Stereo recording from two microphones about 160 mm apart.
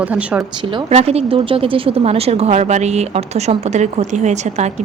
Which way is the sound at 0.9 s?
40° right (ahead or behind).